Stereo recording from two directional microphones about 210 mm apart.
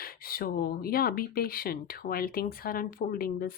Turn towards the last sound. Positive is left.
turn(degrees=45)  # may be behind; listen again after turning